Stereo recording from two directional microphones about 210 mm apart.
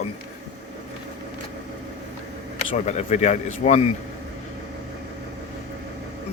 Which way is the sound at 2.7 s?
35° left (ahead or behind).